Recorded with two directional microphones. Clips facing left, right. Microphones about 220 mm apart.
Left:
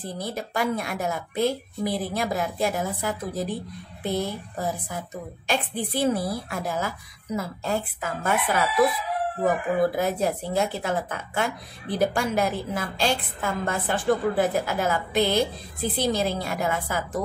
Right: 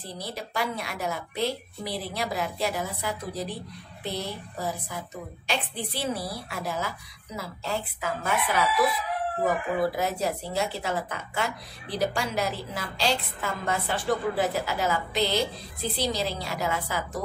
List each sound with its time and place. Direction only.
0.0 s a woman's voice: 50° left (ahead or behind)
9.9 s a woman's voice: 50° left (ahead or behind)